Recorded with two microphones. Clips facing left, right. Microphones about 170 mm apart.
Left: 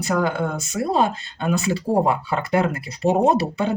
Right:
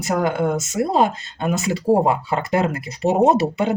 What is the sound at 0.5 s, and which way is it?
Speech, 20° right (ahead or behind).